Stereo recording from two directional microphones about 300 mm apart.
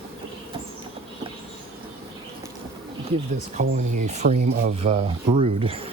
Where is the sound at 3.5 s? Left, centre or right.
Right.